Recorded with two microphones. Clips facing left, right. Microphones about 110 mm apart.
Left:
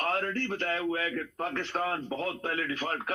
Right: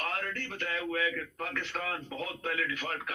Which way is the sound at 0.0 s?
35° left (ahead or behind).